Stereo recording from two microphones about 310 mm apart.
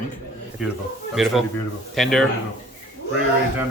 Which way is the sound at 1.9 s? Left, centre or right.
Centre.